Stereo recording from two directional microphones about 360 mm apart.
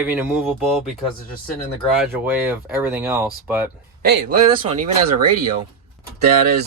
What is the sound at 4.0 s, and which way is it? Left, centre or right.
Speech, right.